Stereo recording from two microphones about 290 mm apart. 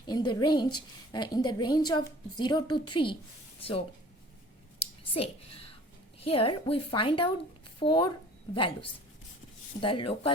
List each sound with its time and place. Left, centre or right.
0.0 s a woman's voice: centre
5.2 s a woman's voice: centre